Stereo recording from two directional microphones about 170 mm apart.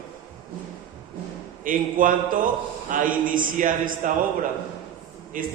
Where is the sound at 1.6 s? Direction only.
55° right (ahead or behind).